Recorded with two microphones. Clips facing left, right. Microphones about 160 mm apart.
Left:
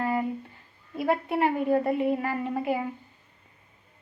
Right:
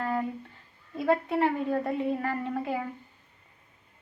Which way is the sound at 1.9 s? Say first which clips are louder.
Left 4 dB; 65° left (ahead or behind).